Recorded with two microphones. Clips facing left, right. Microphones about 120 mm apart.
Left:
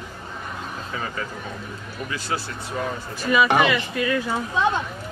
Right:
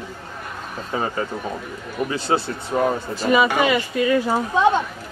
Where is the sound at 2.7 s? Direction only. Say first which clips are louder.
Right 8 dB; 40° right (ahead or behind).